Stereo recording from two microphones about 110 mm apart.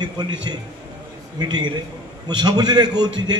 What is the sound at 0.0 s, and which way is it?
A man's voice, 40° right (ahead or behind).